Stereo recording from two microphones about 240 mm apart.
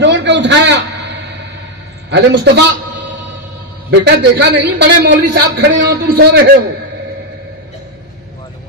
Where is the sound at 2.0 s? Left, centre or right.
Right.